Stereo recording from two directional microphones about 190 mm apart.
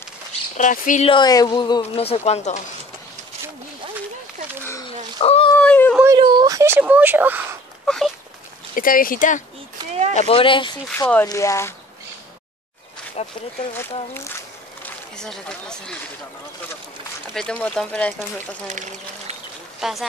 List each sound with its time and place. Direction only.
0.6 s speech: 40° left (ahead or behind)
1.0 s a woman's voice: 25° left (ahead or behind)
5.2 s a sound: 30° left (ahead or behind)
5.6 s a sound: 5° left (ahead or behind)
6.1 s a sound: 25° right (ahead or behind)
7.8 s a sound: 5° left (ahead or behind)
8.7 s speech: 50° left (ahead or behind)
10.1 s a woman's voice: 30° left (ahead or behind)
10.9 s speech: 10° left (ahead or behind)
13.2 s speech: 35° left (ahead or behind)
14.8 s speech: 5° left (ahead or behind)
17.3 s speech: 5° left (ahead or behind)
18.7 s speech: 40° right (ahead or behind)
19.8 s speech: centre (ahead or behind)